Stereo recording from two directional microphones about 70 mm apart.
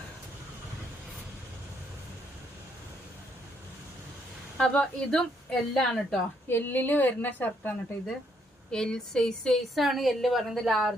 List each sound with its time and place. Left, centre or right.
4.5 s a woman's voice: centre
6.5 s a woman's voice: left
8.7 s a woman's voice: centre